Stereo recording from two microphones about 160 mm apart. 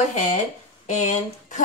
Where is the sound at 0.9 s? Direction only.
50° left (ahead or behind).